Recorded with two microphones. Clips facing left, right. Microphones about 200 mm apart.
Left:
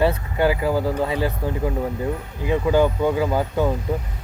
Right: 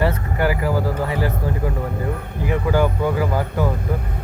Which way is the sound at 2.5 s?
20° left (ahead or behind).